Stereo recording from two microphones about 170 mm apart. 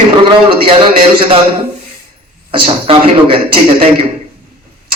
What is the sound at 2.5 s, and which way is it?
A man's voice, 30° right (ahead or behind).